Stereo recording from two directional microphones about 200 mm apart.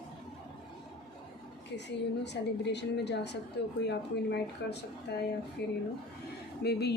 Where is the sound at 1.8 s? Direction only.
60° left (ahead or behind).